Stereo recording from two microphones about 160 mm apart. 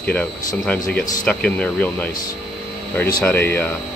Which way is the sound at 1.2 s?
5° left (ahead or behind).